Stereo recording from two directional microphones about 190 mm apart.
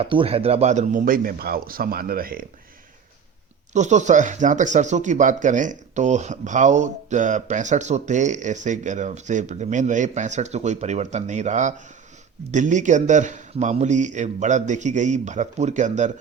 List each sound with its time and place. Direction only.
0.0 s speech: 30° right (ahead or behind); by 2.5 s 50° right (ahead or behind)
3.7 s speech: 40° right (ahead or behind)